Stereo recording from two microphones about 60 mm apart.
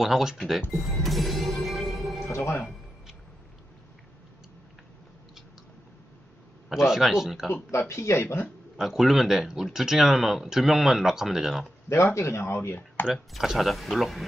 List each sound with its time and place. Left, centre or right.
0.0 s speech: centre
0.7 s music: centre
2.3 s speech: left
6.7 s speech: centre
7.7 s speech: left
8.8 s speech: centre
12.0 s speech: left
13.3 s speech: centre